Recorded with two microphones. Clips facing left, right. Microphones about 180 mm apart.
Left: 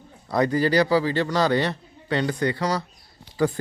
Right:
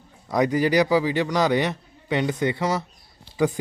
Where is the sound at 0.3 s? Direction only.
15° right (ahead or behind).